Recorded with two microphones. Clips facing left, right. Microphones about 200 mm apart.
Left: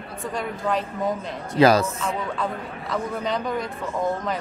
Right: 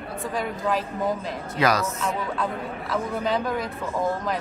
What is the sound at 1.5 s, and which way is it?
Speech, 30° left (ahead or behind).